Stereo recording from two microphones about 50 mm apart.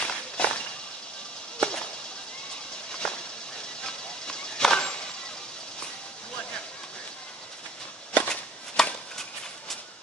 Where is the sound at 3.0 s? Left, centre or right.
Centre.